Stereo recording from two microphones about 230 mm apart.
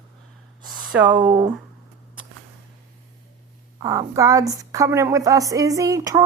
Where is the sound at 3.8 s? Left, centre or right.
Centre.